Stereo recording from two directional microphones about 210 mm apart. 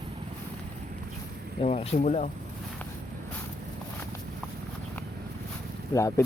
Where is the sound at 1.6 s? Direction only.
30° left (ahead or behind).